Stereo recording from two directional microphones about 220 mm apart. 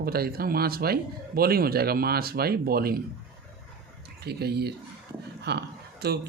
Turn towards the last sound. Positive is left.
turn(degrees=-45)  # may be behind; listen again after turning